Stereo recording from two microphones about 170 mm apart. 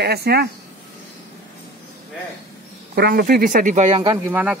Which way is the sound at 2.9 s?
65° right (ahead or behind).